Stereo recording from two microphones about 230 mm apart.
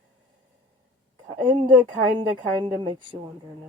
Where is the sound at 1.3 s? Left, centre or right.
Centre.